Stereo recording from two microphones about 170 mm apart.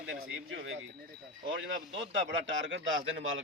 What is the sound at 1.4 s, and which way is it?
Speech, 90° right.